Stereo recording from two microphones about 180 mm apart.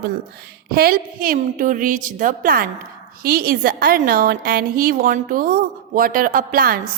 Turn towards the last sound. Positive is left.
turn(degrees=-55)  # may be behind; listen again after turning